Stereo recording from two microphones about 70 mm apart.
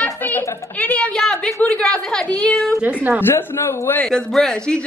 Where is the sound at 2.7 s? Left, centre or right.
Right.